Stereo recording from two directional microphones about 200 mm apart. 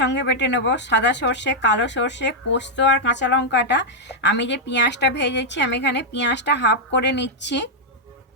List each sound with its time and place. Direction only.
0.0 s speech: 60° left (ahead or behind)